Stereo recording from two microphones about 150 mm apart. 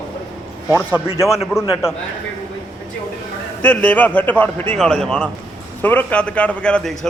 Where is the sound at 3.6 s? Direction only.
10° left (ahead or behind).